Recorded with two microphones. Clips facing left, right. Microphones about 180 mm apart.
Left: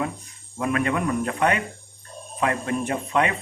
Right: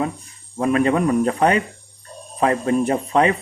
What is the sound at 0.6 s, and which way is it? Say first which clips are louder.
Speech: right 6 dB; 30° right (ahead or behind).